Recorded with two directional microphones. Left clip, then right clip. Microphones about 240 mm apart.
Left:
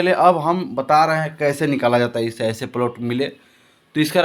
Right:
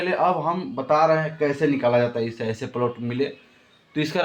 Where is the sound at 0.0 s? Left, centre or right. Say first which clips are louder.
Left 7 dB; left.